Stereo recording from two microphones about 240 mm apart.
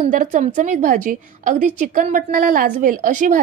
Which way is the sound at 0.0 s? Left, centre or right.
Right.